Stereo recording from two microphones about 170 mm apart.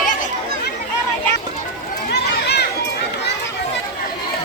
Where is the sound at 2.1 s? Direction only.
75° left (ahead or behind).